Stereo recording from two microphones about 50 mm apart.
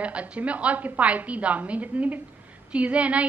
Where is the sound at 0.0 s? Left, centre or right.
Right.